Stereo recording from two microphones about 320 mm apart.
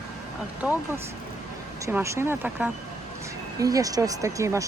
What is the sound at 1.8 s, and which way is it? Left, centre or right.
Speech, centre.